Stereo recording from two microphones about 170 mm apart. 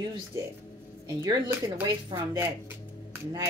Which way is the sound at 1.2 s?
15° right (ahead or behind).